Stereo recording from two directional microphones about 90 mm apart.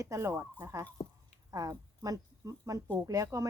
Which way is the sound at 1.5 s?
40° right (ahead or behind).